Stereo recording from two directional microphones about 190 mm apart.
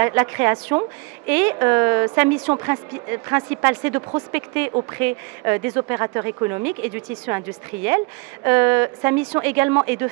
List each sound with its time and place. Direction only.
0.0 s speech: 15° right (ahead or behind)